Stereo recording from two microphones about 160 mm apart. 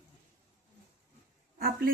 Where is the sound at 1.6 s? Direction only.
70° right (ahead or behind).